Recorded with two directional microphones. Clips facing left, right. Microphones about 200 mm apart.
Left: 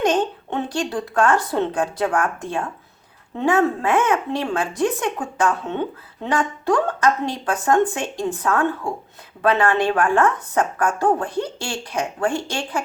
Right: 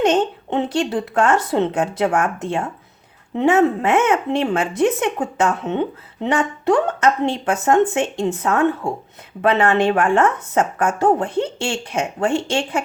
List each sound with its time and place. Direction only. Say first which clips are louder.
0.0 s a woman's voice: right 3 dB; 25° right (ahead or behind)